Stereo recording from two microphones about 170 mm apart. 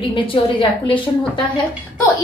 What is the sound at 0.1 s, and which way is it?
Speech, 30° left (ahead or behind).